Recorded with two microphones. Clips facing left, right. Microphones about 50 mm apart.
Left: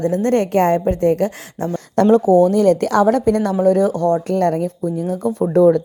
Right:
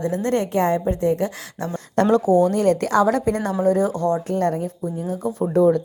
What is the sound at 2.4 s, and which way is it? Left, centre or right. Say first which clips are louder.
Speech: left 5 dB; right.